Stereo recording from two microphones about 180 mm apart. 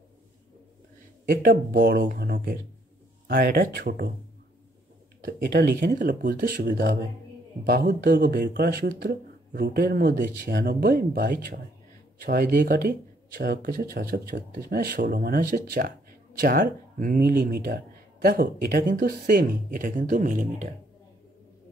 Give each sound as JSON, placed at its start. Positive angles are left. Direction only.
{"t": 1.2, "sound": "speech", "side_deg": -50}
{"t": 5.2, "sound": "speech", "side_deg": -50}
{"t": 10.7, "sound": "speech", "side_deg": -60}